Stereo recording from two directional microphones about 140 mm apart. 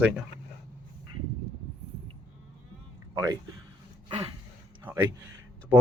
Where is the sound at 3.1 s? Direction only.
30° right (ahead or behind).